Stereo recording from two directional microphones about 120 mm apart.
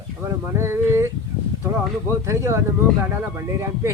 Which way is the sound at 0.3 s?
20° right (ahead or behind).